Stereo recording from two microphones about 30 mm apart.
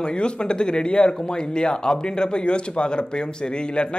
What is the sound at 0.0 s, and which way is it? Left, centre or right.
Speech, left.